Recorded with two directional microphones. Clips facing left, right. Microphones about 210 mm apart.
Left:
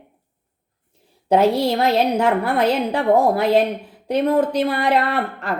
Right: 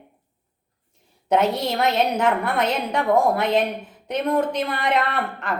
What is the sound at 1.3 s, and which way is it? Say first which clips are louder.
A woman's voice: left 4 dB; 30° left (ahead or behind).